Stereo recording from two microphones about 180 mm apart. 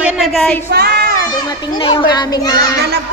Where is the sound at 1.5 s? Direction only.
25° left (ahead or behind).